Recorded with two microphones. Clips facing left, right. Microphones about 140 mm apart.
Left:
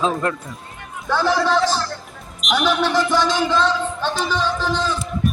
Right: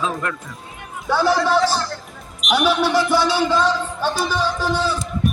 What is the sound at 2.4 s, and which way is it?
Speech, 10° right (ahead or behind).